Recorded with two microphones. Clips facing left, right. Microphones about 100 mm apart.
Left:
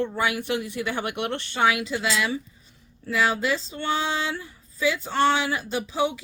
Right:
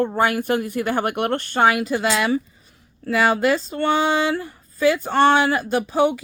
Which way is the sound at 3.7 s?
60° right (ahead or behind).